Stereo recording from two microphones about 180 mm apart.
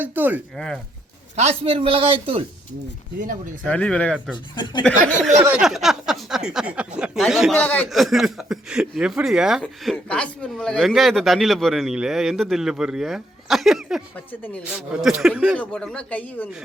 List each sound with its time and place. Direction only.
0.0 s a man's voice: 10° right (ahead or behind)
0.5 s speech: 5° left (ahead or behind)
1.4 s a man's voice: 30° right (ahead or behind)
3.2 s speech: 45° right (ahead or behind)
3.6 s speech: 5° left (ahead or behind)
5.4 s a man's voice: 10° right (ahead or behind)
15.5 s speech: 5° left (ahead or behind)